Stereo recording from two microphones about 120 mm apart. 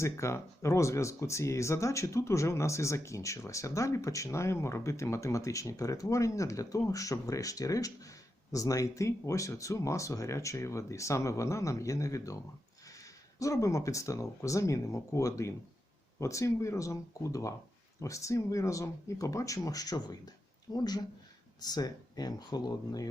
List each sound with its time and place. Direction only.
0.0 s speech: 25° left (ahead or behind)